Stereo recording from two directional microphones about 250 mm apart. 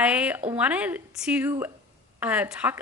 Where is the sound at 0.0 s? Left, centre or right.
Centre.